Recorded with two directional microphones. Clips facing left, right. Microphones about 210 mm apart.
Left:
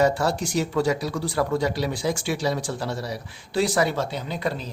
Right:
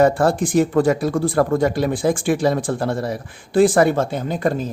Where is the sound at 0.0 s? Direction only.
50° right (ahead or behind).